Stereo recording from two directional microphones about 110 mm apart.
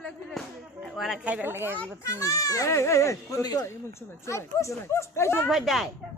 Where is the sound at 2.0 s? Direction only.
30° left (ahead or behind).